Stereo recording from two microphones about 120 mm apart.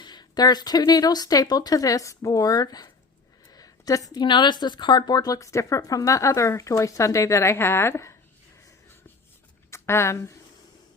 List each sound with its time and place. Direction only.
0.0 s a woman's voice: 35° left (ahead or behind)
9.6 s speech: 20° left (ahead or behind)